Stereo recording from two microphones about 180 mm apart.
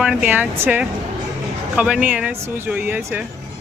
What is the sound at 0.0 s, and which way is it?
Speech, 5° right (ahead or behind).